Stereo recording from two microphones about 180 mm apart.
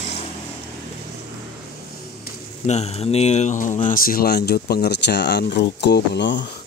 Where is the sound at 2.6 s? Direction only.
35° left (ahead or behind); by 6.4 s 75° left (ahead or behind).